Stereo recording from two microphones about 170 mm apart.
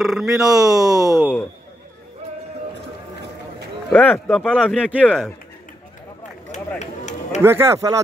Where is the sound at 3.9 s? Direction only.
10° left (ahead or behind).